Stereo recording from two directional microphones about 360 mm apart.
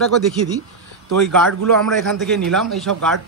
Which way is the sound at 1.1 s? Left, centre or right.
Right.